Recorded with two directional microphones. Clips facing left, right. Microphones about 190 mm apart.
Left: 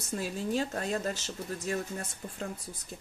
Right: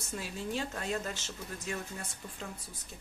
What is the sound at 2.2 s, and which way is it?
Speech, 40° left (ahead or behind).